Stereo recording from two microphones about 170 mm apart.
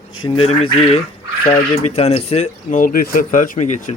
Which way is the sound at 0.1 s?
30° left (ahead or behind).